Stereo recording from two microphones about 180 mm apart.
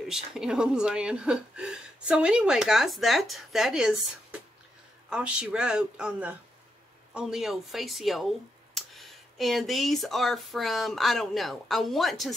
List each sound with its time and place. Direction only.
0.1 s speech: 5° right (ahead or behind)